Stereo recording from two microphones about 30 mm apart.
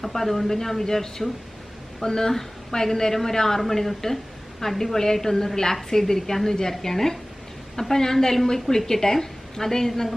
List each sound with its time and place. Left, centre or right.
0.0 s a woman's voice: centre